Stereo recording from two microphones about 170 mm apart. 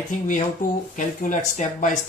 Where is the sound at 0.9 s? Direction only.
45° left (ahead or behind).